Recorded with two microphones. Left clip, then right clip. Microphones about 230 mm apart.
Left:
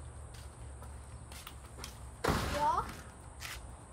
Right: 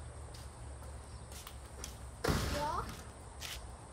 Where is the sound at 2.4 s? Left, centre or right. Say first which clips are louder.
Left 5 dB; left.